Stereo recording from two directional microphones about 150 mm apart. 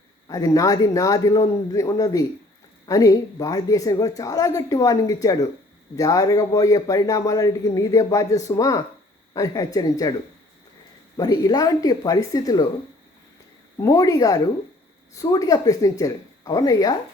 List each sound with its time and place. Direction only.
0.3 s a man's voice: 25° left (ahead or behind)
11.2 s a man's voice: 25° left (ahead or behind)
13.7 s a man's voice: 25° left (ahead or behind)